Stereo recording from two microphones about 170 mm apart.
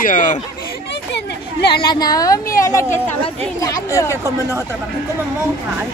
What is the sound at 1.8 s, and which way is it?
Speech, 25° left (ahead or behind).